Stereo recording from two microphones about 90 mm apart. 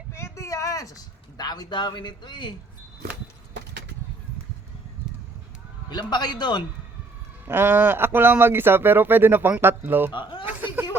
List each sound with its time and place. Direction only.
0.1 s a sound: 35° left (ahead or behind); by 2.6 s 55° left (ahead or behind)
5.9 s a man's voice: 50° left (ahead or behind)
7.4 s speech: 25° right (ahead or behind)
10.1 s speech: 65° left (ahead or behind)
10.4 s chuckle: 20° right (ahead or behind)